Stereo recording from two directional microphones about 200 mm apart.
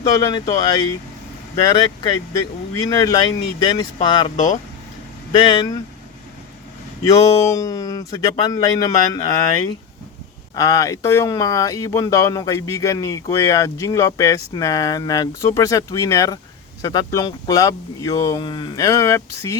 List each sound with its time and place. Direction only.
0.1 s speech: 15° left (ahead or behind)
2.7 s speech: 20° left (ahead or behind)
5.3 s speech: 25° left (ahead or behind)
7.0 s speech: 15° left (ahead or behind)